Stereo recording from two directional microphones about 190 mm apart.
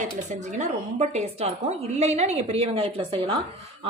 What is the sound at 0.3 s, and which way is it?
A woman's voice, 40° right (ahead or behind).